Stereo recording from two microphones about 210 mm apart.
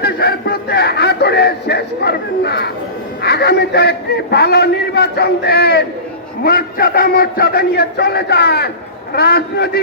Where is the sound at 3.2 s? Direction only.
50° left (ahead or behind).